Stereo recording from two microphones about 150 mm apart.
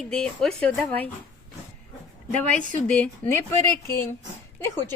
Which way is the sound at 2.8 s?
10° left (ahead or behind).